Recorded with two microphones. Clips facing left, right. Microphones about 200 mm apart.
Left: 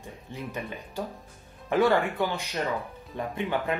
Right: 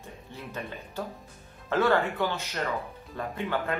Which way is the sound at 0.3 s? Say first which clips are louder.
Left 3 dB; 15° left (ahead or behind).